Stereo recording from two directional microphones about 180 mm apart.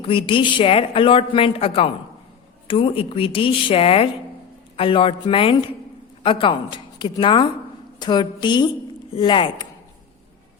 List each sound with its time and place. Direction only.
0.0 s a woman's voice: 30° left (ahead or behind)